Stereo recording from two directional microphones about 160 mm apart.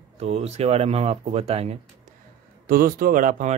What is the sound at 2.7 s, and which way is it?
Speech, 65° right (ahead or behind).